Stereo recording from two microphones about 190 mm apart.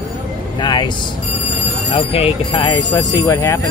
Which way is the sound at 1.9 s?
30° left (ahead or behind).